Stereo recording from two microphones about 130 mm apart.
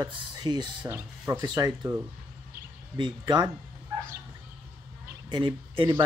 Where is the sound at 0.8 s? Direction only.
20° right (ahead or behind).